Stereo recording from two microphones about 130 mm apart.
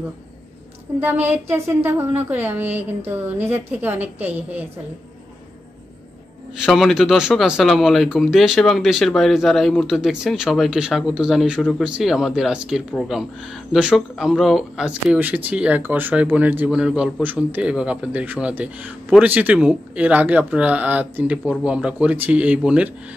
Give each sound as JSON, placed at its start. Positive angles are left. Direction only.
{"t": 1.0, "sound": "speech", "side_deg": -15}
{"t": 6.6, "sound": "speech", "side_deg": 0}